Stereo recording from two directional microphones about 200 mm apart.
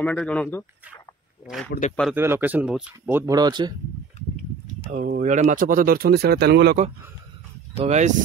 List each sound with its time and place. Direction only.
0.0 s speech: 5° left (ahead or behind); by 3.7 s 20° right (ahead or behind)
4.9 s speech: 45° right (ahead or behind)
7.8 s speech: 35° right (ahead or behind)